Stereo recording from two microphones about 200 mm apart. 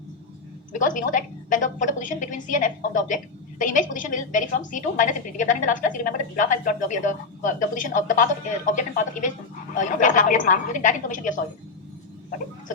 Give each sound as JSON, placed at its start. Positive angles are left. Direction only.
{"t": 0.7, "sound": "a woman's voice", "side_deg": 40}